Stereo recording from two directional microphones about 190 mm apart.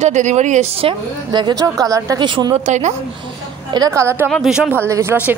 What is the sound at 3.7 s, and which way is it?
Speech, 20° right (ahead or behind).